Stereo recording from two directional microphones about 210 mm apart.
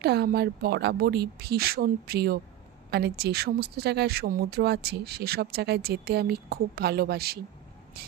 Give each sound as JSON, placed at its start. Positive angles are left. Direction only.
{"t": 0.0, "sound": "speech", "side_deg": -50}